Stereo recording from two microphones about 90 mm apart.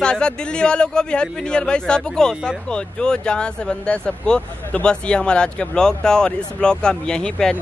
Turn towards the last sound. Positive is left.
turn(degrees=10)  # may be behind; listen again after turning